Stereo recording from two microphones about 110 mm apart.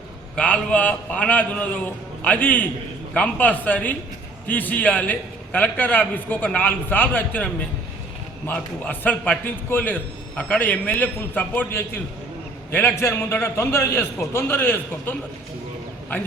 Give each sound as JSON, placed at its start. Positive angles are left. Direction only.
{"t": 0.3, "sound": "a man's voice", "side_deg": 10}